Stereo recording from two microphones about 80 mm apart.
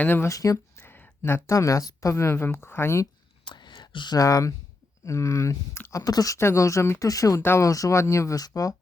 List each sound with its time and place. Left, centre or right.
0.0 s speech: left
0.3 s speech: left
0.9 s a sound: left
1.5 s a woman's voice: left
3.4 s whispering: left
4.2 s speech: left
6.1 s a woman's voice: left
7.1 s speech: left
7.3 s a woman's voice: left
7.6 s speech: left